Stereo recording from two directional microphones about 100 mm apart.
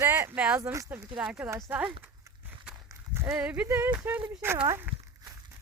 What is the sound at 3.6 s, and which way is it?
Speech, 25° right (ahead or behind).